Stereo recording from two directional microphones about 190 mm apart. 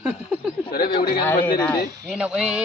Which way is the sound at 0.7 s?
50° left (ahead or behind).